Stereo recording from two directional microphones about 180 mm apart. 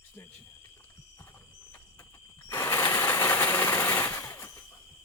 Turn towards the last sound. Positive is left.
turn(degrees=15)  # may be behind; listen again after turning